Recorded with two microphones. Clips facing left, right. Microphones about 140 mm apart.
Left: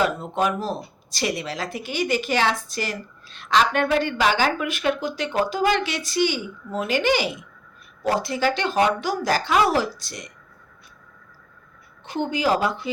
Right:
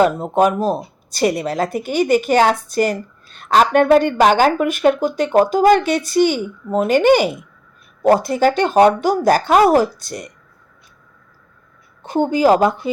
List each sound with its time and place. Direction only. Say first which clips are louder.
0.0 s speech: right 8 dB; 45° right (ahead or behind)
12.0 s speech: right 9 dB; 45° right (ahead or behind)